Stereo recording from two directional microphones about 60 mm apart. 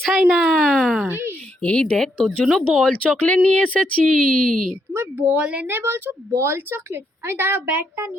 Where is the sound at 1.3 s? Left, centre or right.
Left.